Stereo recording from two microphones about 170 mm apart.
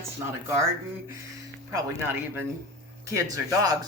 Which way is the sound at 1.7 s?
15° right (ahead or behind).